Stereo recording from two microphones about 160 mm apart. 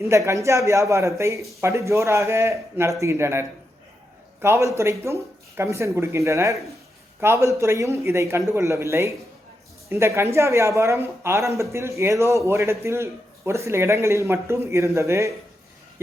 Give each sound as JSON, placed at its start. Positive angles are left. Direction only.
{"t": 0.0, "sound": "a man's voice", "side_deg": -20}